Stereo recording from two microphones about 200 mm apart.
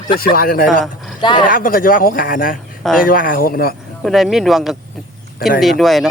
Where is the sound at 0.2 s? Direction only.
45° left (ahead or behind).